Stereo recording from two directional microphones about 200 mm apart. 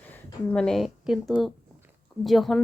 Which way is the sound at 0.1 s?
5° left (ahead or behind).